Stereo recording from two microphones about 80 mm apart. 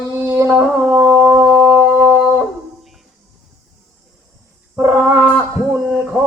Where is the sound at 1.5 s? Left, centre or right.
Centre.